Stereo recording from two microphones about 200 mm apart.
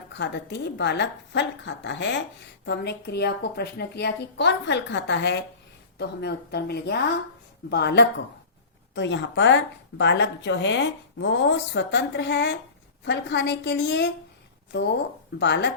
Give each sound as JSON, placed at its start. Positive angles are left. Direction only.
{"t": 0.1, "sound": "speech", "side_deg": 60}